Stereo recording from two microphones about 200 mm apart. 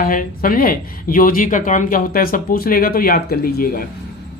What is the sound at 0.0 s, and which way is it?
Speech, 45° left (ahead or behind).